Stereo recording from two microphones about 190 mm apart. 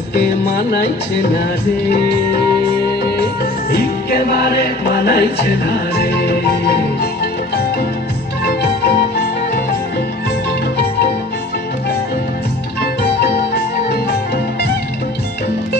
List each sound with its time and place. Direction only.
3.7 s music: 55° left (ahead or behind)
8.5 s music: 60° left (ahead or behind)
13.5 s music: 60° left (ahead or behind)